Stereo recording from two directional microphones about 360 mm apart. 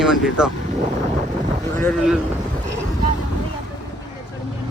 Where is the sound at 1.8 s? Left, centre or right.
Centre.